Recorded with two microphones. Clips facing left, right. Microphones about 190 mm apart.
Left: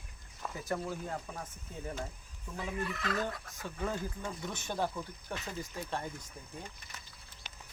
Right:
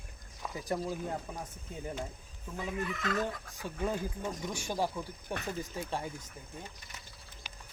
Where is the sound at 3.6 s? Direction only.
15° right (ahead or behind).